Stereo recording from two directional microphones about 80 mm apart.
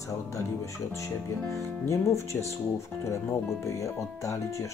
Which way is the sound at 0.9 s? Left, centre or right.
Left.